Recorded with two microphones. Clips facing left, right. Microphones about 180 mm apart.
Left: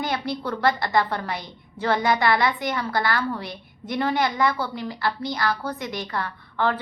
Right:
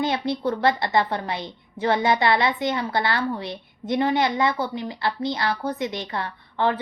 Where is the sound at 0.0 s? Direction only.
25° right (ahead or behind).